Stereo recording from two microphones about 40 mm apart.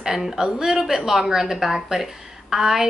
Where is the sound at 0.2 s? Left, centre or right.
Centre.